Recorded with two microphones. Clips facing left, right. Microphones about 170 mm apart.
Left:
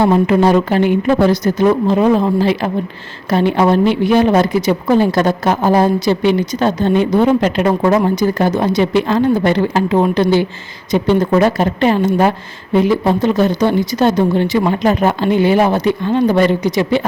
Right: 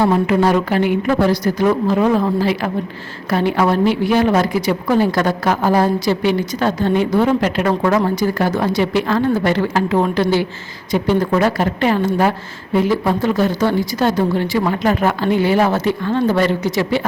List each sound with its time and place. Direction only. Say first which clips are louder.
0.0 s a woman's voice: left 3 dB; 25° left (ahead or behind)